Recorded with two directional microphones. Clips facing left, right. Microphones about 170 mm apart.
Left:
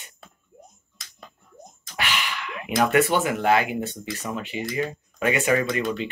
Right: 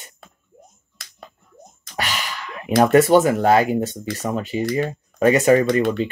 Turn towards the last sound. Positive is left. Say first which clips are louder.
# right 7 dB
turn(degrees=-40)  # may be behind; listen again after turning